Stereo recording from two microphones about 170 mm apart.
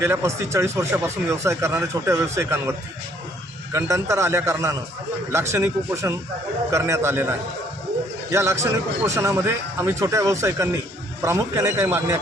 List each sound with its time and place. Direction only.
0.0 s speech: 15° right (ahead or behind)